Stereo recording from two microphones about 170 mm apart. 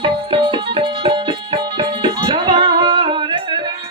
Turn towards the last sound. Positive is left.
turn(degrees=-30)  # may be behind; listen again after turning